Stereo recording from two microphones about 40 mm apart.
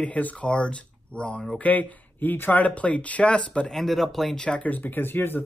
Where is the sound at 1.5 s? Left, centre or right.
Left.